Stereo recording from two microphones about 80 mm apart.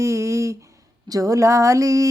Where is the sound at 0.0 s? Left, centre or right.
Right.